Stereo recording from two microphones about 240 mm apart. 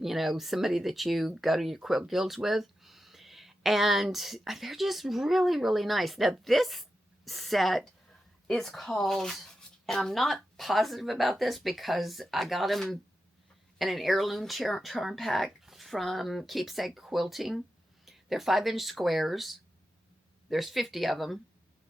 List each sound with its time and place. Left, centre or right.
0.0 s speech: centre